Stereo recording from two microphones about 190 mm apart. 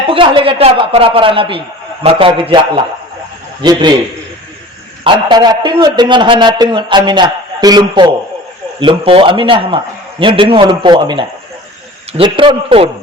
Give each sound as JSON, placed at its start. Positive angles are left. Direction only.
{"t": 0.1, "sound": "a man's voice", "side_deg": -25}
{"t": 5.0, "sound": "a man's voice", "side_deg": -20}